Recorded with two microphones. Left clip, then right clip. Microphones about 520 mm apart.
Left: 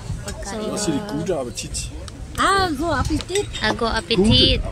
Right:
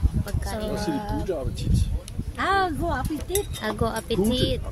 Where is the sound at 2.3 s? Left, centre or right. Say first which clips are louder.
Left 5 dB; right.